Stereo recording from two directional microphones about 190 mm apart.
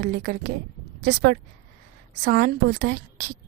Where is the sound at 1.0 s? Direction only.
65° right (ahead or behind).